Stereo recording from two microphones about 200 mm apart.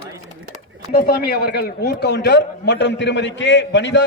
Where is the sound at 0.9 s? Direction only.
50° left (ahead or behind).